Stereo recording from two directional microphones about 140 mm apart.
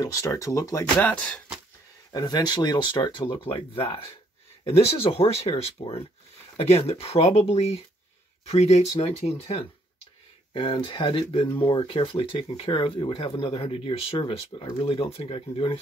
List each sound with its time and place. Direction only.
0.0 s speech: 25° left (ahead or behind)
0.9 s speech: 10° left (ahead or behind)
2.1 s speech: 30° left (ahead or behind)